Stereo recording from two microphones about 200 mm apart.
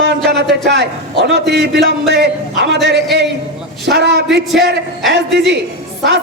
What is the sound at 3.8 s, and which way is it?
Speech, 55° right (ahead or behind).